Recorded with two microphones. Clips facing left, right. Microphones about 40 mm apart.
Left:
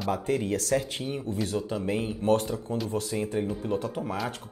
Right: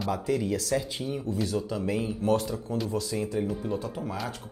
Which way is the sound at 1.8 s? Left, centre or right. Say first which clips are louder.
Left 2 dB; left.